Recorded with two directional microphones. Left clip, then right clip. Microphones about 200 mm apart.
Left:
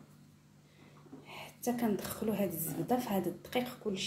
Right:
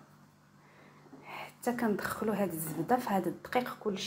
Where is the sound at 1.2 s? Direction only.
10° right (ahead or behind).